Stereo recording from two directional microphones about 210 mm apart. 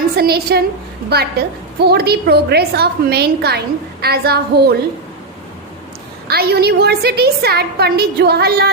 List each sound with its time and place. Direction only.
0.2 s a woman's voice: 50° right (ahead or behind)
6.2 s a woman's voice: 50° right (ahead or behind)